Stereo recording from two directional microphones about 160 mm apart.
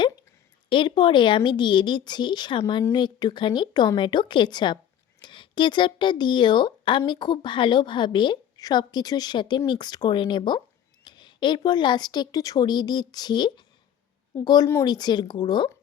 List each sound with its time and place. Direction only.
0.7 s speech: 30° left (ahead or behind)